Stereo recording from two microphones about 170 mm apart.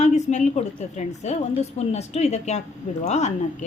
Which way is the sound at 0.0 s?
40° left (ahead or behind).